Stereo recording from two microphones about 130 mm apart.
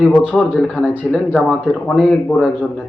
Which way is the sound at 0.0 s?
10° left (ahead or behind).